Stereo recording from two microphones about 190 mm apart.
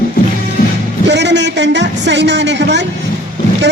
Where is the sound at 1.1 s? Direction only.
65° right (ahead or behind).